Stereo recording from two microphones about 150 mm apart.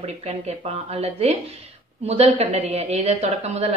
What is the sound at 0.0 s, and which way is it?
A woman's voice, 45° right (ahead or behind).